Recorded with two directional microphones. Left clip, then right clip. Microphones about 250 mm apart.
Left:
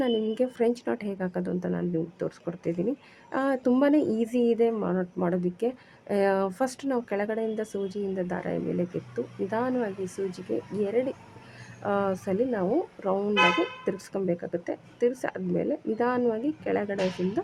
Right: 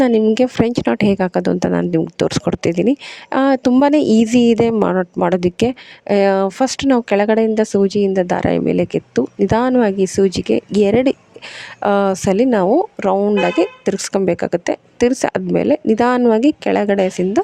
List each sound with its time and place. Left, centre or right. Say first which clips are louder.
0.0 s speech: right 13 dB; right